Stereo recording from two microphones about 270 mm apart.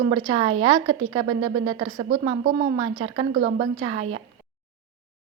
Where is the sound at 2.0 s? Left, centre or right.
Right.